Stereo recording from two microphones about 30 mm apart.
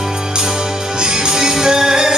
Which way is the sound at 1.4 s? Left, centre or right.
Centre.